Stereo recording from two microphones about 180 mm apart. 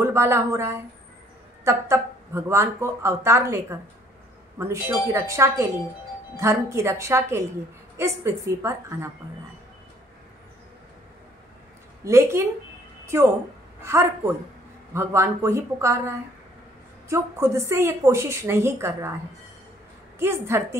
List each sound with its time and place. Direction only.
0.0 s a woman's voice: 15° right (ahead or behind)
4.6 s speech: 15° right (ahead or behind)
12.0 s a woman's voice: 15° right (ahead or behind)
20.2 s speech: 15° right (ahead or behind)